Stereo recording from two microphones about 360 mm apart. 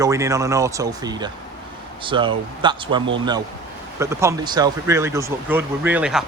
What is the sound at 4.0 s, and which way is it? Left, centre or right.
Speech, centre.